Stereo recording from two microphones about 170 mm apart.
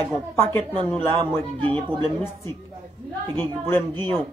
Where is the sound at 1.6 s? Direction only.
30° right (ahead or behind).